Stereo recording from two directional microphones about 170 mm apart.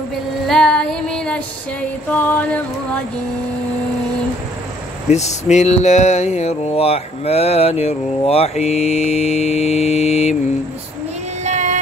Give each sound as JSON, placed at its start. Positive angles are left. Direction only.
{"t": 0.5, "sound": "female singing", "side_deg": 5}
{"t": 2.0, "sound": "a sound", "side_deg": 10}
{"t": 5.1, "sound": "mantra", "side_deg": 40}
{"t": 11.4, "sound": "child singing", "side_deg": -45}